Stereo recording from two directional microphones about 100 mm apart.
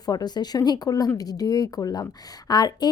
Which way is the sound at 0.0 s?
40° left (ahead or behind).